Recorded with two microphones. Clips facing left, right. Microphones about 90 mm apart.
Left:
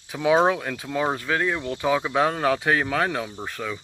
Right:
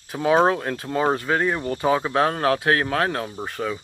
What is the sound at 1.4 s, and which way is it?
Speech, 15° right (ahead or behind).